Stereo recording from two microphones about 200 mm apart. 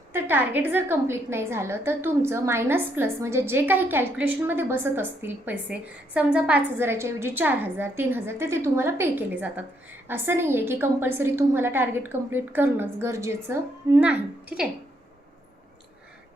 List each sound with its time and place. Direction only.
0.1 s a woman's voice: 10° right (ahead or behind)